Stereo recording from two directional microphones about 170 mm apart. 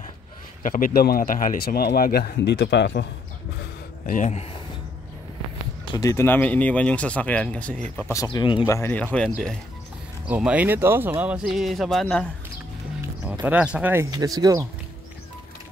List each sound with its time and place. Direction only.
0.6 s speech: 50° left (ahead or behind); by 3.1 s 90° left
4.0 s speech: 50° left (ahead or behind)
5.9 s speech: 15° left (ahead or behind)
8.1 s speech: 20° left (ahead or behind)
8.6 s speech: 15° left (ahead or behind)
10.2 s speech: 5° right (ahead or behind)
13.2 s speech: 10° right (ahead or behind)
14.1 s speech: 20° right (ahead or behind)